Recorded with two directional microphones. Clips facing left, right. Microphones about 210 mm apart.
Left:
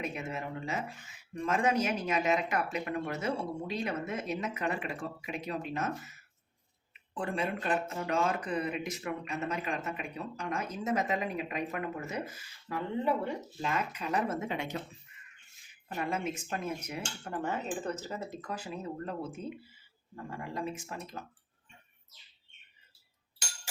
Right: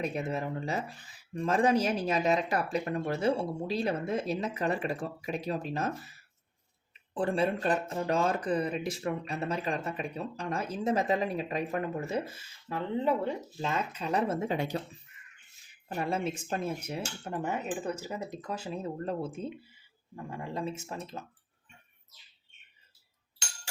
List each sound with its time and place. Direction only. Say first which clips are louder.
0.0 s speech: right 5 dB; 35° right (ahead or behind)
16.0 s speech: right 2 dB; 30° right (ahead or behind)